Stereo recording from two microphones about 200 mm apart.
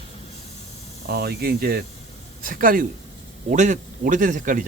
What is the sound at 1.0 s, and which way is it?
Speech, 50° right (ahead or behind).